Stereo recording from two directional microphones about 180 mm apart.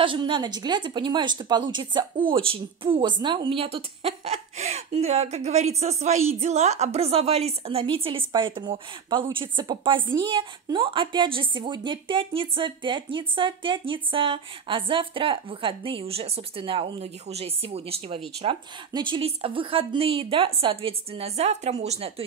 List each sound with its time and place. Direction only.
0.0 s a woman's voice: 25° right (ahead or behind)